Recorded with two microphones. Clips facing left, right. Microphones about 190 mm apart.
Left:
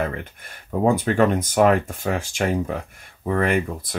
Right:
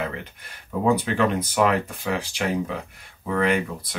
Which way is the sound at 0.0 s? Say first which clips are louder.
Left 4 dB; 50° left (ahead or behind).